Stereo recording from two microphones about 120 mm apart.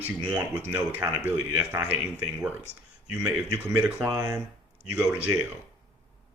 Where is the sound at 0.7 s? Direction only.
15° right (ahead or behind).